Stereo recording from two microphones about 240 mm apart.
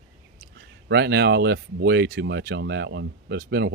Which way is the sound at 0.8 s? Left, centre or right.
Right.